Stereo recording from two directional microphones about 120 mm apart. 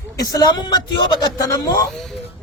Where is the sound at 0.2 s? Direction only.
30° left (ahead or behind).